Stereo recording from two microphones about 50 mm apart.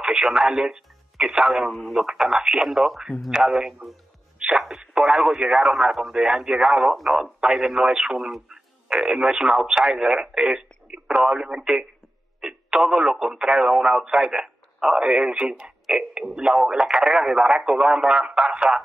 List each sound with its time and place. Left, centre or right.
0.0 s speech: centre
1.7 s speech: centre
2.0 s speech: centre
3.3 s speech: centre
4.4 s radio: centre
5.8 s speech: centre